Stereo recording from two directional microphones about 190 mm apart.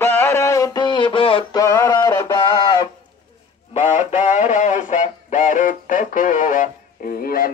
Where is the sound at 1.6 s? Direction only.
15° left (ahead or behind).